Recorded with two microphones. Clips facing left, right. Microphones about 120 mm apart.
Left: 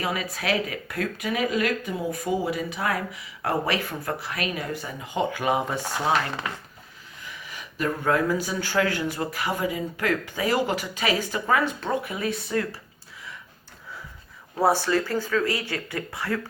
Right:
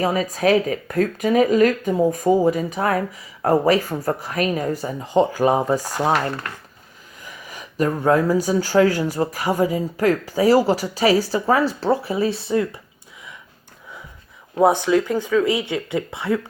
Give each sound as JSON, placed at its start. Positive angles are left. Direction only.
{"t": 0.0, "sound": "speech", "side_deg": -40}
{"t": 7.2, "sound": "speech", "side_deg": -40}
{"t": 14.5, "sound": "speech", "side_deg": -20}